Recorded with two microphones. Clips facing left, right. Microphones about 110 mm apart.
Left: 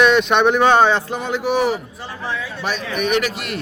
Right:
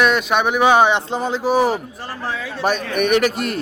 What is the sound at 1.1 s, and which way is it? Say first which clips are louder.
Speech: right 2 dB; 30° right (ahead or behind).